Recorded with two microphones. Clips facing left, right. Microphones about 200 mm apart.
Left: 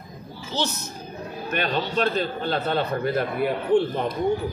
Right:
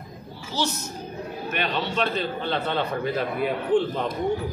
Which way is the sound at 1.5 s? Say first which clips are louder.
Left 3 dB; 40° left (ahead or behind).